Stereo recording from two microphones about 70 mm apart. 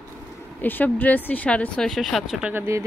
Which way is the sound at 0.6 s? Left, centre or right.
Left.